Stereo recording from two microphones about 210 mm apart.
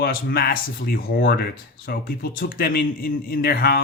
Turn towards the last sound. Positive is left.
turn(degrees=45)  # may be behind; listen again after turning